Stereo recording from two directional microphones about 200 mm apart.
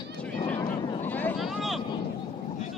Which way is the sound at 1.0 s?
10° left (ahead or behind).